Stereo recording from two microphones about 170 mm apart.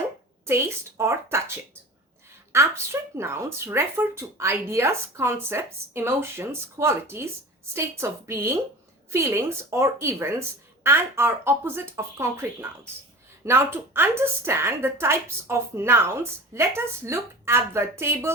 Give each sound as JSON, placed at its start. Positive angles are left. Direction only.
{"t": 0.4, "sound": "a woman's voice", "side_deg": -15}